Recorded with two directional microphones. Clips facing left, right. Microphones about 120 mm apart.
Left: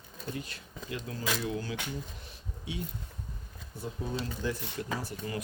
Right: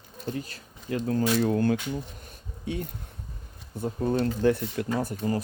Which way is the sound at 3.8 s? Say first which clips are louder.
Right 10 dB; 55° right (ahead or behind).